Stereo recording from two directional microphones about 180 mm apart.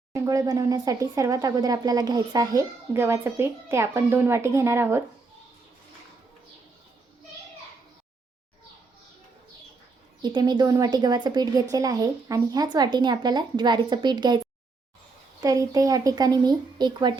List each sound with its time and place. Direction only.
0.1 s speech: 20° right (ahead or behind)
10.2 s speech: 25° right (ahead or behind)